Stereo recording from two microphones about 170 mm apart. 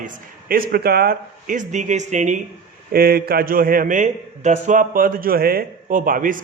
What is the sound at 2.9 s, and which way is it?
A man's voice, 65° right (ahead or behind).